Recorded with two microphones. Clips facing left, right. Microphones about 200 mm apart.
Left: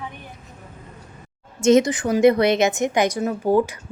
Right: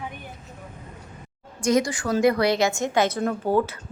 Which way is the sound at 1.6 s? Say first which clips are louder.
Left 6 dB; 25° left (ahead or behind).